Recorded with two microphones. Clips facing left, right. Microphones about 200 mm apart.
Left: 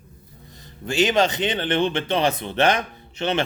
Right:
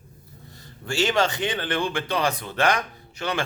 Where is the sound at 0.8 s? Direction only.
20° left (ahead or behind).